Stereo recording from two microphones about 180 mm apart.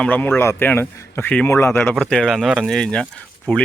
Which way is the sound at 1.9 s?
5° left (ahead or behind).